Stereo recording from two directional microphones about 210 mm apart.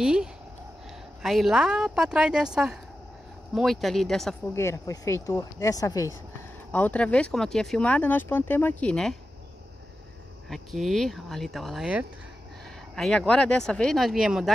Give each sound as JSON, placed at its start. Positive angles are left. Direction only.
{"t": 0.0, "sound": "speech", "side_deg": -5}
{"t": 4.6, "sound": "speech", "side_deg": 15}
{"t": 10.5, "sound": "speech", "side_deg": 0}